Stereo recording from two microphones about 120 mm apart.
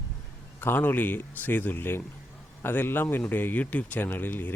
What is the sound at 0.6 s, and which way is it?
A man's voice, 15° left (ahead or behind).